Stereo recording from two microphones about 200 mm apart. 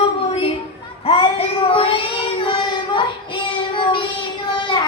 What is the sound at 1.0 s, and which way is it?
Child singing, 25° left (ahead or behind).